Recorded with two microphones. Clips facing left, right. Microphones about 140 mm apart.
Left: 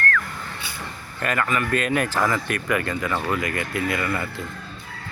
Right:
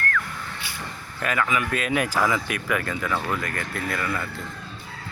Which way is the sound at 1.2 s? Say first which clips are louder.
Left 1 dB; centre (ahead or behind).